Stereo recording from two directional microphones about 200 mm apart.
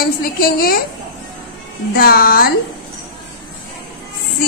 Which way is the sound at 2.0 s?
45° left (ahead or behind).